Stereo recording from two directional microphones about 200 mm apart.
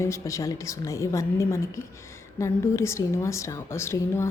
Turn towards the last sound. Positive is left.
turn(degrees=15)  # may be behind; listen again after turning